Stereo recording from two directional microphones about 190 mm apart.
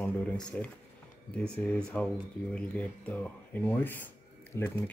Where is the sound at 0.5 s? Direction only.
5° left (ahead or behind).